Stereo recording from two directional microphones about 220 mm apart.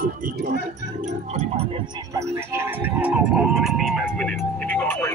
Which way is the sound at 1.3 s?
25° right (ahead or behind).